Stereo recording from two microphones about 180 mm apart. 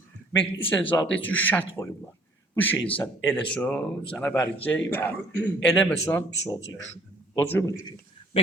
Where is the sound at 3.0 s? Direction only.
10° left (ahead or behind).